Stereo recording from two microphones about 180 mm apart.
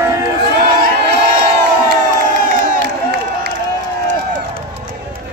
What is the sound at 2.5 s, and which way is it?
Crowd, 50° right (ahead or behind).